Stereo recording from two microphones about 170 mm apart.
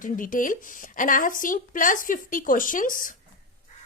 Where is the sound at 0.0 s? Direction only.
50° left (ahead or behind).